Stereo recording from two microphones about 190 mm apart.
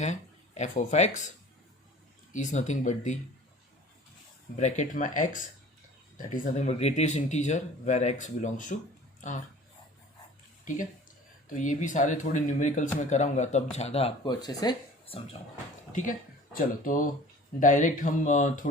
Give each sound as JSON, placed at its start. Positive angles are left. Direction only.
{"t": 0.0, "sound": "speech", "side_deg": 40}
{"t": 2.3, "sound": "speech", "side_deg": 40}
{"t": 4.5, "sound": "speech", "side_deg": 40}
{"t": 11.4, "sound": "speech", "side_deg": 40}
{"t": 15.9, "sound": "speech", "side_deg": 45}